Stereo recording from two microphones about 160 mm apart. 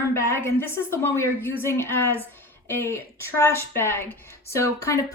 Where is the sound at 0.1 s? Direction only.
15° left (ahead or behind).